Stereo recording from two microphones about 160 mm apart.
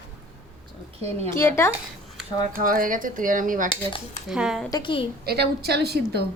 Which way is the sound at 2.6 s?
60° right (ahead or behind).